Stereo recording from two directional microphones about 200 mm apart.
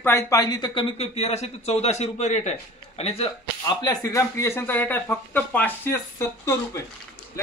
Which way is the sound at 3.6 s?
15° left (ahead or behind).